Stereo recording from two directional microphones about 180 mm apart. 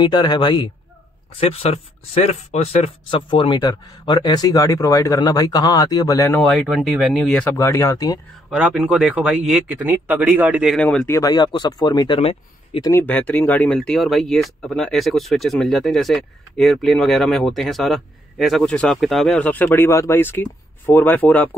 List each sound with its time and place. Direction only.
0.0 s speech: 25° left (ahead or behind)
6.4 s speech: centre (ahead or behind)
7.5 s speech: 15° left (ahead or behind)
8.5 s a man's voice: 5° right (ahead or behind)
10.8 s speech: 5° left (ahead or behind)
11.1 s speech: 25° left (ahead or behind)
12.2 s speech: 35° left (ahead or behind)
12.8 s speech: 10° left (ahead or behind)